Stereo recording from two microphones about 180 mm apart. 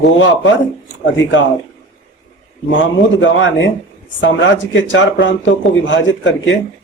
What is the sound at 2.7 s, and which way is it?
A man's voice, 90° left.